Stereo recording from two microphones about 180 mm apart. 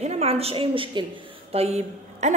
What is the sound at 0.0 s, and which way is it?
A woman's voice, 35° right (ahead or behind).